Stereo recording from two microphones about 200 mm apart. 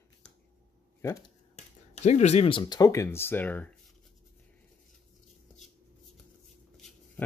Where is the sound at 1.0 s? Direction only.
15° left (ahead or behind).